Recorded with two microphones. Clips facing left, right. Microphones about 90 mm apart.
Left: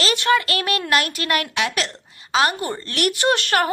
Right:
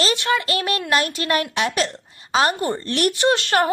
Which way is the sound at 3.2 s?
20° right (ahead or behind).